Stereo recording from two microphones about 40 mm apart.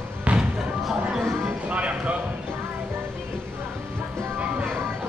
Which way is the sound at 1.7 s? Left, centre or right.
Right.